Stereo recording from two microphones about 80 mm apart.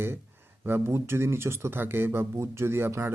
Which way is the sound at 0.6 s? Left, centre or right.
Right.